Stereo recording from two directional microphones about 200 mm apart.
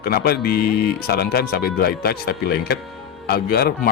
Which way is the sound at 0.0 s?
50° left (ahead or behind).